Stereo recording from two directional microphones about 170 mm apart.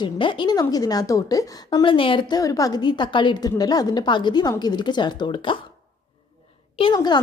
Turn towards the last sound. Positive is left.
turn(degrees=25)  # may be behind; listen again after turning